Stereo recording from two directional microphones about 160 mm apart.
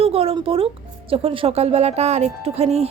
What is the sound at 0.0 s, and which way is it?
Speech, 35° right (ahead or behind).